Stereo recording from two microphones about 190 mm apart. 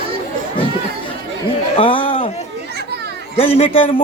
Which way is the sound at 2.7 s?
60° right (ahead or behind).